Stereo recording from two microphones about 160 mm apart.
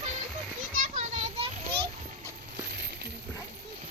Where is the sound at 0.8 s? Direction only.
50° right (ahead or behind).